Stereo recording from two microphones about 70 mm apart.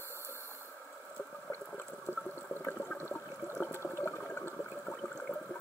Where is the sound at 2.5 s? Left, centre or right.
Left.